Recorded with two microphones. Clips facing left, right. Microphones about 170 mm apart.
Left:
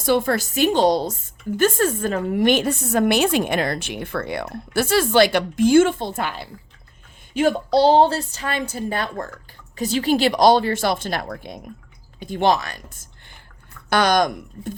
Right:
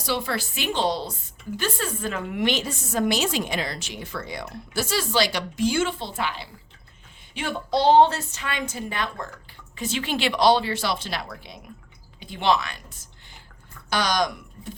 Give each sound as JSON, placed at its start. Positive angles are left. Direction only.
{"t": 0.0, "sound": "a woman's voice", "side_deg": 50}